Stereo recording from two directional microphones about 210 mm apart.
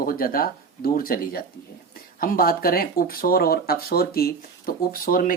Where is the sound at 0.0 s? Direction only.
45° left (ahead or behind).